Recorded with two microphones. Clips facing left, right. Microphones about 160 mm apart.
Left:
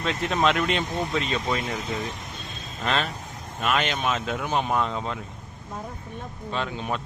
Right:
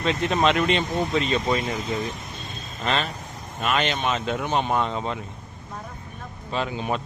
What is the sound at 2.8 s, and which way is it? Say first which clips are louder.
Speech: right 1 dB; centre (ahead or behind).